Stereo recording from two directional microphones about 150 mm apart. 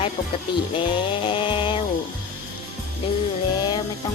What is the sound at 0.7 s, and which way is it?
Chainsaw, 35° left (ahead or behind).